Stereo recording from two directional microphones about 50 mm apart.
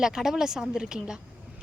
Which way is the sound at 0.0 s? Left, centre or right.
Centre.